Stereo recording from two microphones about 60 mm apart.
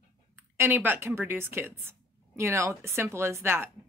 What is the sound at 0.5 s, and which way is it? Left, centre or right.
A woman's voice, right.